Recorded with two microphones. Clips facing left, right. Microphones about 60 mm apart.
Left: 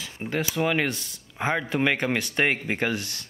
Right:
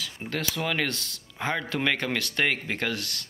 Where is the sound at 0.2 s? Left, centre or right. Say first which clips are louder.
Left 5 dB; centre.